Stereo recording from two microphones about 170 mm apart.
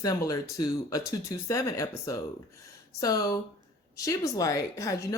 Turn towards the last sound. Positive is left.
turn(degrees=20)  # may be behind; listen again after turning